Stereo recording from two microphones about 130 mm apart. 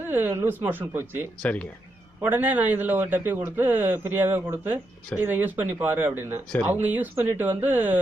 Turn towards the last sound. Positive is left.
turn(degrees=-15)  # may be behind; listen again after turning